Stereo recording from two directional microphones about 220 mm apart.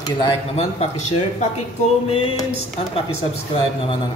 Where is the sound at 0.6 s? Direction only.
30° left (ahead or behind).